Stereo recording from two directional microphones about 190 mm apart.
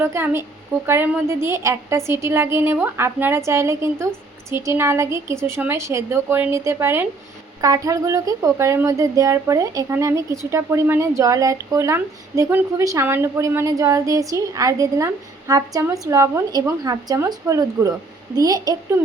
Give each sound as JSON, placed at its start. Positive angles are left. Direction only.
{"t": 0.0, "sound": "a woman's voice", "side_deg": -15}